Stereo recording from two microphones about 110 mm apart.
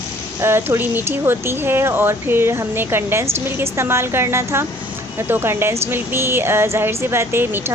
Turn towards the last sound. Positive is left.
turn(degrees=-20)  # may be behind; listen again after turning